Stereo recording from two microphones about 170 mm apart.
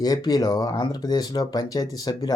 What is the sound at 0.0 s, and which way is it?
Speech, 20° left (ahead or behind).